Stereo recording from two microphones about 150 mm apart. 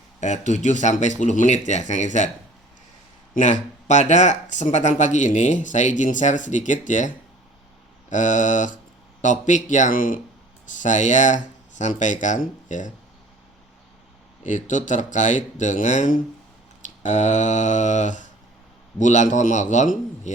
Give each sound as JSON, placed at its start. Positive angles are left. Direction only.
{"t": 0.2, "sound": "speech", "side_deg": 55}
{"t": 3.3, "sound": "speech", "side_deg": 55}
{"t": 8.1, "sound": "speech", "side_deg": 55}
{"t": 14.4, "sound": "speech", "side_deg": 55}